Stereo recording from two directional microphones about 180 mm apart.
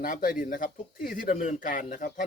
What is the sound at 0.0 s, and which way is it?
Speech, 45° left (ahead or behind).